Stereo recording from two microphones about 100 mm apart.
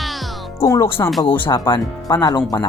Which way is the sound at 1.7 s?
45° left (ahead or behind).